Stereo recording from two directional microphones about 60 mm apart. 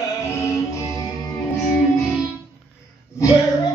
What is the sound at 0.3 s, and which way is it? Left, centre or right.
Music, left.